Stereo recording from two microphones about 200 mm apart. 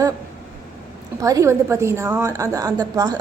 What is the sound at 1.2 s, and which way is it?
A woman's voice, 15° right (ahead or behind).